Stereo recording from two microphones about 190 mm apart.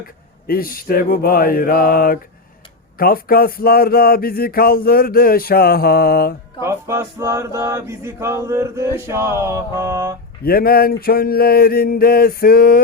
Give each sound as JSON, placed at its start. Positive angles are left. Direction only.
{"t": 0.4, "sound": "speech", "side_deg": 50}
{"t": 6.6, "sound": "male singing", "side_deg": -15}
{"t": 10.4, "sound": "speech", "side_deg": 50}